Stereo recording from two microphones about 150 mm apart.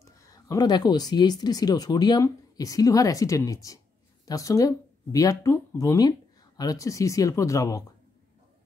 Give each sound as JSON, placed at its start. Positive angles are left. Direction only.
{"t": 0.0, "sound": "speech", "side_deg": 20}